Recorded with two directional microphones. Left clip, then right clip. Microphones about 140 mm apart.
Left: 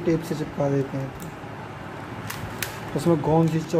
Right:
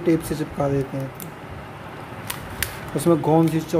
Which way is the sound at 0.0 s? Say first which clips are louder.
Right 3 dB; 30° right (ahead or behind).